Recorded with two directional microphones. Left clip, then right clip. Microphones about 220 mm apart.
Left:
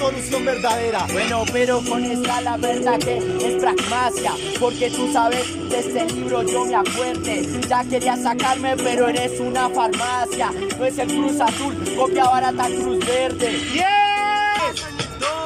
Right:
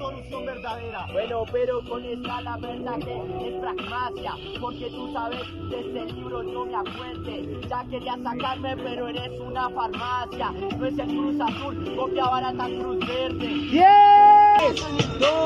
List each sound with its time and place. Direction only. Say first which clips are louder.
0.0 s music: left 12 dB; 25° left (ahead or behind)
2.6 s music: left 13 dB; 15° left (ahead or behind)
4.6 s music: left 13 dB; 25° left (ahead or behind)
7.7 s music: left 11 dB; 25° left (ahead or behind)
12.0 s music: left 8 dB; 20° left (ahead or behind)
13.7 s female singing: right 6 dB; 30° right (ahead or behind)